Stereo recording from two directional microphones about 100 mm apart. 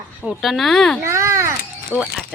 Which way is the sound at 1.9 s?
20° left (ahead or behind).